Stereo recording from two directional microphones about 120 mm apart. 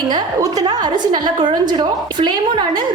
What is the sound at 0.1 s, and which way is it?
A woman's voice, 35° right (ahead or behind).